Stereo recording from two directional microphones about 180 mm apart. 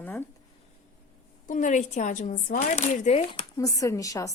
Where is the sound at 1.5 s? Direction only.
45° left (ahead or behind).